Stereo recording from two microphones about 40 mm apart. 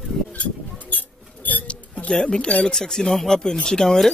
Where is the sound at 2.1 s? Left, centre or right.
Left.